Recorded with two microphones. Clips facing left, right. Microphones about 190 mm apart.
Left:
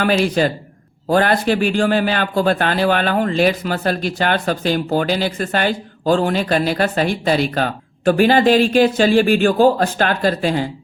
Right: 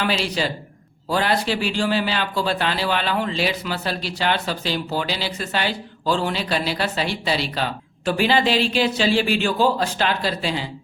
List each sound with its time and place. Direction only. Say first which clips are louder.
0.0 s a man's voice: left 7 dB; 50° left (ahead or behind)